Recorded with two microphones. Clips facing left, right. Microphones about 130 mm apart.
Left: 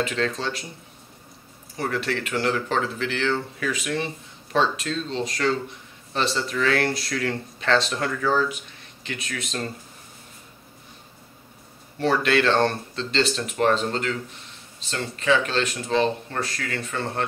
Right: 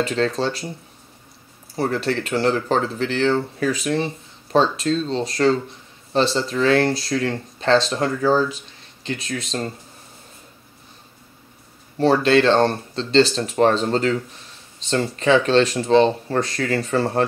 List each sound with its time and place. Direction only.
0.0 s speech: 35° right (ahead or behind)
1.8 s speech: 35° right (ahead or behind)
12.0 s speech: 30° right (ahead or behind)